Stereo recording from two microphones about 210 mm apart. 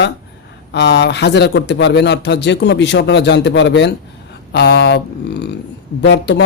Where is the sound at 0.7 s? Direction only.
55° left (ahead or behind).